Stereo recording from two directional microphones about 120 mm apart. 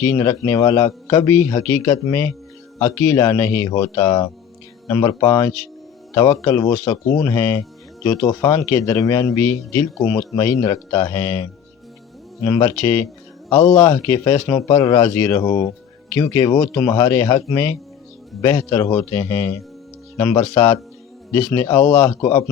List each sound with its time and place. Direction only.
0.1 s a man's voice: 25° left (ahead or behind)
12.5 s a man's voice: 25° left (ahead or behind)
13.5 s a man's voice: 35° left (ahead or behind)